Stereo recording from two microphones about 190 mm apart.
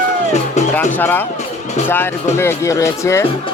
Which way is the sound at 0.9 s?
10° left (ahead or behind).